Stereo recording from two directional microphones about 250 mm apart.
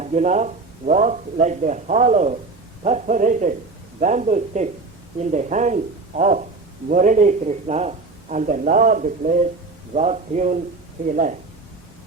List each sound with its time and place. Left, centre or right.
0.0 s a man's voice: right